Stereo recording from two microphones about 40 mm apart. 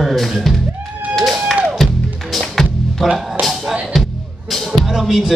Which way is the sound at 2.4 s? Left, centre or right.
Centre.